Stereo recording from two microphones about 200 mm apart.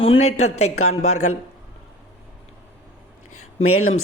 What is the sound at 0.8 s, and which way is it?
Speech, 90° left.